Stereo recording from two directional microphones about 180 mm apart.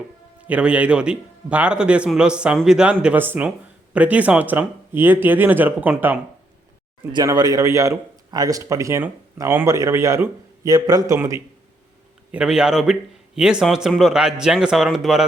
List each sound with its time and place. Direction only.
0.4 s a man's voice: 5° right (ahead or behind)
7.1 s speech: 20° right (ahead or behind)
12.3 s a man's voice: 5° right (ahead or behind)